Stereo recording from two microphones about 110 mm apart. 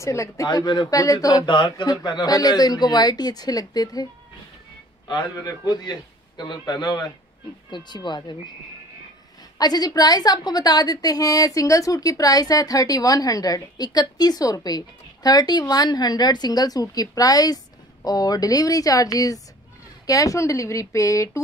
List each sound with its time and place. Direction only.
0.0 s a woman's voice: 25° left (ahead or behind)
0.5 s a woman's voice: 40° left (ahead or behind)
1.5 s a woman's voice: 45° left (ahead or behind)
9.6 s a woman's voice: 35° left (ahead or behind)